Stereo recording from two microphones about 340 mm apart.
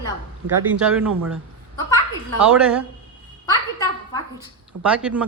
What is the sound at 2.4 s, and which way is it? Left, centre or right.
Speech, centre.